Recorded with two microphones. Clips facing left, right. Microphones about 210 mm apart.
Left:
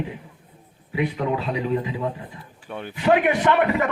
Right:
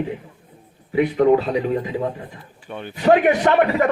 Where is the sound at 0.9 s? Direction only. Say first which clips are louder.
Right 9 dB; 45° right (ahead or behind).